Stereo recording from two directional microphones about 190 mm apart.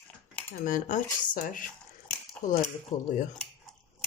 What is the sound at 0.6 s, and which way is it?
Speech, 45° left (ahead or behind).